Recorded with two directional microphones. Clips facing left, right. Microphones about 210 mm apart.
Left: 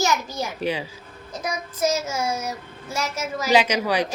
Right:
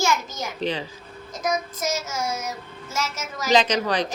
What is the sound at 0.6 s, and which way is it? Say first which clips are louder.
Speech: even; 10° left (ahead or behind).